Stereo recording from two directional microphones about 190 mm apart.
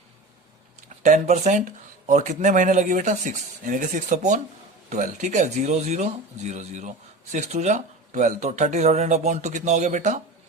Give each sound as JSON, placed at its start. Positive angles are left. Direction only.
{"t": 1.0, "sound": "speech", "side_deg": -40}